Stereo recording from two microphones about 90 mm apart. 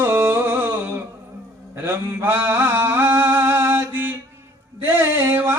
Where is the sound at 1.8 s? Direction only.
25° right (ahead or behind).